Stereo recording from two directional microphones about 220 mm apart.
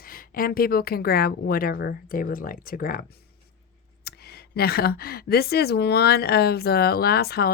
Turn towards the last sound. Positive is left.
turn(degrees=45)  # may be behind; listen again after turning